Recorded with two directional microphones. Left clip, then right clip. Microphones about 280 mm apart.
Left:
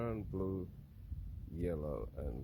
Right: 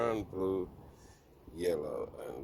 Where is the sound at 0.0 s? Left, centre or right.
Centre.